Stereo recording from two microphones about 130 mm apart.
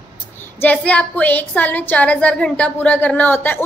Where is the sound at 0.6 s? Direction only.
10° left (ahead or behind).